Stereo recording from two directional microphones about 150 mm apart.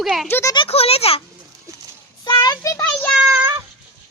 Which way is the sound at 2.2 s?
30° left (ahead or behind).